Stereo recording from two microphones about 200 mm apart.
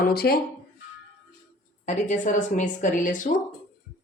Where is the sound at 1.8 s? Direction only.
35° left (ahead or behind).